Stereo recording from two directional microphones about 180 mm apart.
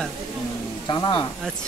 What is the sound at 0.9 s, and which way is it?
Speech, 25° left (ahead or behind).